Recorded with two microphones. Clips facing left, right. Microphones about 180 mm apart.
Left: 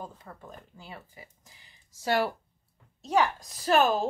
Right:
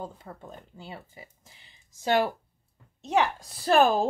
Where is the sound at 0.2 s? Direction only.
25° right (ahead or behind).